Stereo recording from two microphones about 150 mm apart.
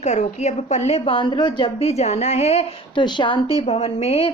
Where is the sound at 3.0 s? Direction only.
30° left (ahead or behind).